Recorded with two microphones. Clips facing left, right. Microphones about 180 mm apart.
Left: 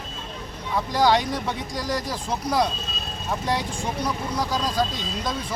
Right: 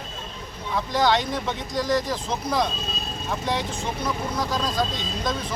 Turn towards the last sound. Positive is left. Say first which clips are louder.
# right 1 dB
turn(degrees=10)  # may be behind; listen again after turning